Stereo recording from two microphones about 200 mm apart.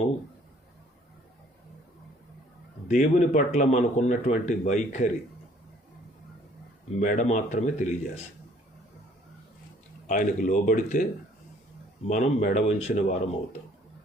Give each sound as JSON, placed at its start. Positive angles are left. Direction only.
{"t": 2.8, "sound": "speech", "side_deg": 40}
{"t": 7.0, "sound": "speech", "side_deg": 40}
{"t": 10.1, "sound": "speech", "side_deg": 40}
{"t": 12.0, "sound": "speech", "side_deg": 40}